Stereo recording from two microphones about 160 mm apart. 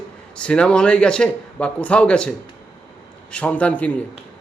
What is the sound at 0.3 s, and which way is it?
Speech, 5° left (ahead or behind).